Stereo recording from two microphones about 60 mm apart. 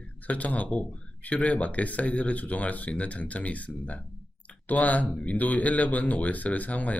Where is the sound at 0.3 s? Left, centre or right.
Left.